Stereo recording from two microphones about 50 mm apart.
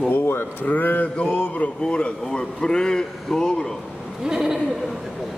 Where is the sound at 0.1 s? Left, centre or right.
Left.